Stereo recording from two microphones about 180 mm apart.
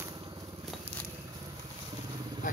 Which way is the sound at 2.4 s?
50° left (ahead or behind).